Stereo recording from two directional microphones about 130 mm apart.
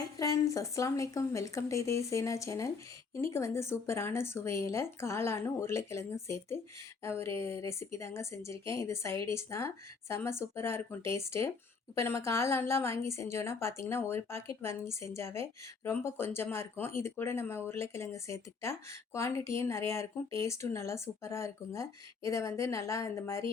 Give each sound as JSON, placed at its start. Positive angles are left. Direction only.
{"t": 0.2, "sound": "a woman's voice", "side_deg": 25}